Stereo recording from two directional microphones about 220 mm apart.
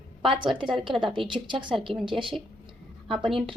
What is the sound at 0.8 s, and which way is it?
Speech, 20° right (ahead or behind).